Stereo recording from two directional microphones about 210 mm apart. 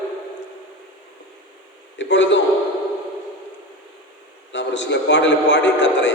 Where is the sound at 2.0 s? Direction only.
60° left (ahead or behind).